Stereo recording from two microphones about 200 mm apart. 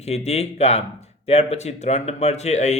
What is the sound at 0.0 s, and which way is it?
A man's voice, 30° left (ahead or behind).